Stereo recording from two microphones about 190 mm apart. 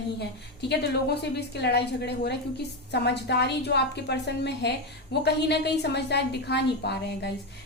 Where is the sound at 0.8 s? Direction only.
60° left (ahead or behind).